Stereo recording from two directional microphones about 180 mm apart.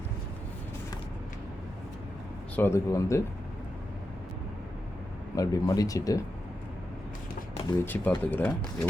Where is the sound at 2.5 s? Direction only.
15° left (ahead or behind).